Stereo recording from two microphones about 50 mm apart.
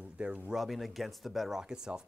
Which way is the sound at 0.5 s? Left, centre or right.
Centre.